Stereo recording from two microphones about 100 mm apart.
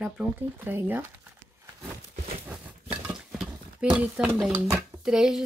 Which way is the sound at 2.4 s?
15° right (ahead or behind).